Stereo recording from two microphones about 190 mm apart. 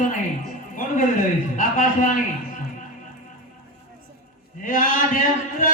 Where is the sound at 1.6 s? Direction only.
45° left (ahead or behind).